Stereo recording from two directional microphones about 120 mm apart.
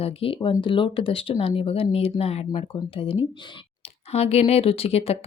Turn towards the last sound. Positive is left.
turn(degrees=60)  # may be behind; listen again after turning